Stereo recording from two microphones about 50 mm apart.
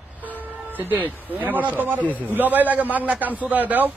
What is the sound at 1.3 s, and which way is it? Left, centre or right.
A man's voice, right.